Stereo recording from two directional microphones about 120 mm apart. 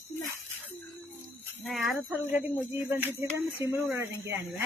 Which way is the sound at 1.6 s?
Centre (ahead or behind).